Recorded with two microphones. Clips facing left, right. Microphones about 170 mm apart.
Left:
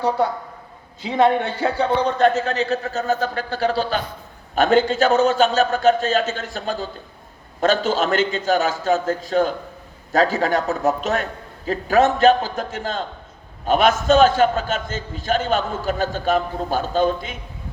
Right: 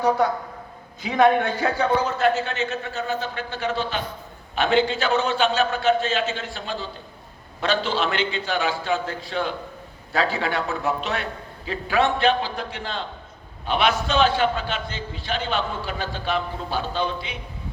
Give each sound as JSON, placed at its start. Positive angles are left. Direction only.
{"t": 1.0, "sound": "a man's voice", "side_deg": 25}